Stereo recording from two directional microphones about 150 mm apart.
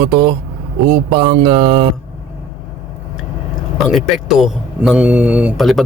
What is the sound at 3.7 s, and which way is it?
Speech, centre (ahead or behind).